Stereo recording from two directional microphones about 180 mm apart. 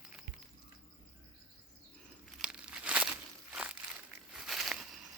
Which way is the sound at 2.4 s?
5° right (ahead or behind).